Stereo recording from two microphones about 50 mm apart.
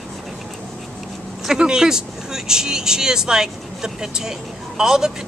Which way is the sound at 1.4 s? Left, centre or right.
Centre.